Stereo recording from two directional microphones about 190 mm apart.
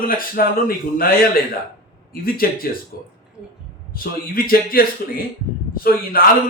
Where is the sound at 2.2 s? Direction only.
50° left (ahead or behind).